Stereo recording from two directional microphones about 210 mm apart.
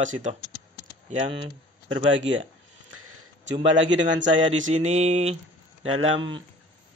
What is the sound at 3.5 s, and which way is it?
Speech, 60° right (ahead or behind).